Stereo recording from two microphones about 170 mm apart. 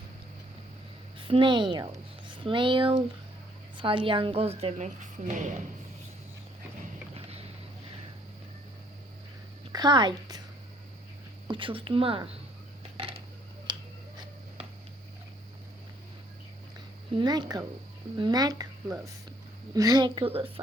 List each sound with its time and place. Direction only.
1.3 s a woman's voice: 30° right (ahead or behind); by 5.4 s 45° right (ahead or behind)
7.1 s vehicle: 35° right (ahead or behind)
9.7 s a woman's voice: 25° right (ahead or behind)
11.4 s a woman's voice: 30° right (ahead or behind)
13.7 s a sound: 25° right (ahead or behind)
17.2 s speech: 25° right (ahead or behind)